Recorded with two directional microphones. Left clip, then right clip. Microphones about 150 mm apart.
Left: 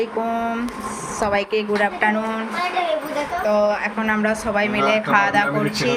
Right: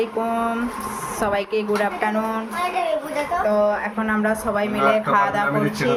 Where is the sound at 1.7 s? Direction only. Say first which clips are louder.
Left 3 dB; 10° right (ahead or behind).